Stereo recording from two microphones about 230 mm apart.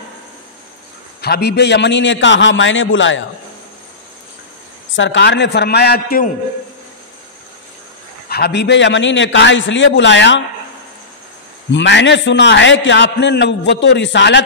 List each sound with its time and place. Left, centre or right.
1.2 s a man's voice: left
4.9 s a man's voice: left
8.3 s a man's voice: left
11.7 s a man's voice: left